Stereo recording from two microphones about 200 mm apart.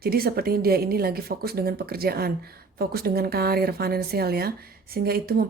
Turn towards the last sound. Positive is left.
turn(degrees=-50)  # may be behind; listen again after turning